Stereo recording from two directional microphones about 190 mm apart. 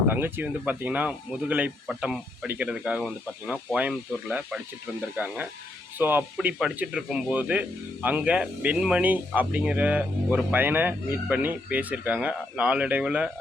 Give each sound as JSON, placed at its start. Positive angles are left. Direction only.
{"t": 0.1, "sound": "speech", "side_deg": -10}